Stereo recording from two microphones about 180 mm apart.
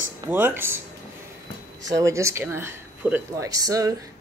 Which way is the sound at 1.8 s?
15° right (ahead or behind).